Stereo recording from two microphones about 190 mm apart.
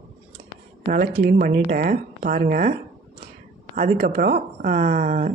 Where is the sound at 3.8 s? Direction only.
45° right (ahead or behind).